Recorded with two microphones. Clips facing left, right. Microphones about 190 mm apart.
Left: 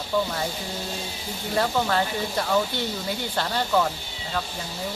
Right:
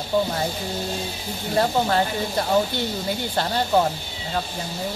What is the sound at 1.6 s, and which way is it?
Speech, 30° right (ahead or behind).